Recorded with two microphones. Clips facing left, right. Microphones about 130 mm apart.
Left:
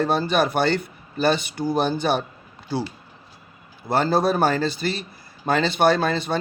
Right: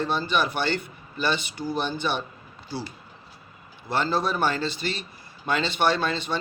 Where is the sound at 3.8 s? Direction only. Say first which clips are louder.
Left 5 dB; 40° left (ahead or behind).